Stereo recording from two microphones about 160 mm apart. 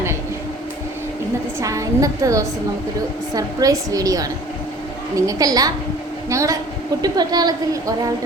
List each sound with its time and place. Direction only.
1.5 s a woman's voice: 20° right (ahead or behind)